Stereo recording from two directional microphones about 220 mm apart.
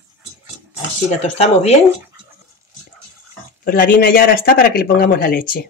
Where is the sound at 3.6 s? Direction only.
40° left (ahead or behind).